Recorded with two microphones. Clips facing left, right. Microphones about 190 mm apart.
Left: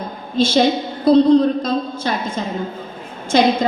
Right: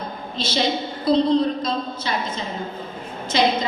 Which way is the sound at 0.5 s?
50° left (ahead or behind).